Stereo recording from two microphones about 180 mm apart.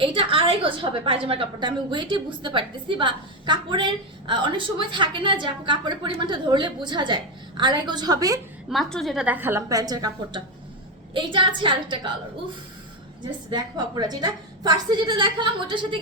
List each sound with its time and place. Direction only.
0.0 s a woman's voice: 30° right (ahead or behind)
8.7 s a woman's voice: centre (ahead or behind); by 12.1 s 25° right (ahead or behind)
13.5 s a woman's voice: 25° right (ahead or behind)